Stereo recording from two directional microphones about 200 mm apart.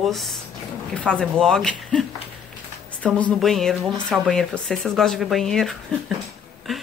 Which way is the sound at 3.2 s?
5° left (ahead or behind).